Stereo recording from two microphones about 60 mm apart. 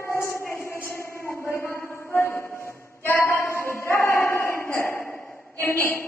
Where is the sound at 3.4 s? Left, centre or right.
Left.